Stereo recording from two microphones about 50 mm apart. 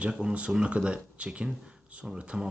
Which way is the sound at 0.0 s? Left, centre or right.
Centre.